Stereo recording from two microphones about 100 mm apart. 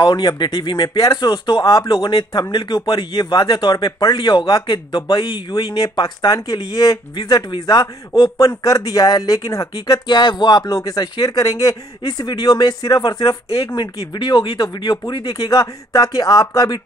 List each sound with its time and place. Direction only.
0.0 s speech: 45° left (ahead or behind)
0.8 s speech: 35° left (ahead or behind)
1.6 s speech: 35° left (ahead or behind)
3.1 s a man's voice: 60° left (ahead or behind); by 7.0 s 35° left (ahead or behind)
7.2 s a man's voice: 45° left (ahead or behind)
10.0 s speech: 50° left (ahead or behind)
10.7 s a man's voice: 35° left (ahead or behind)
15.3 s a man's voice: 35° left (ahead or behind)